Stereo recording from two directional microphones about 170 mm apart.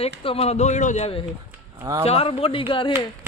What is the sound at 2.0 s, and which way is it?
Speech, 35° left (ahead or behind).